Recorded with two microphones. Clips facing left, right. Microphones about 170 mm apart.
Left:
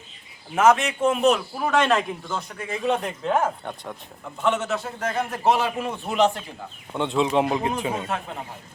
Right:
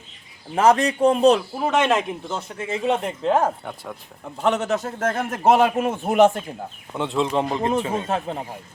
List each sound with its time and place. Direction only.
0.5 s a man's voice: 35° right (ahead or behind)
3.6 s speech: 5° right (ahead or behind)
4.4 s a man's voice: 40° right (ahead or behind)
6.9 s speech: centre (ahead or behind)
7.6 s a man's voice: 35° right (ahead or behind)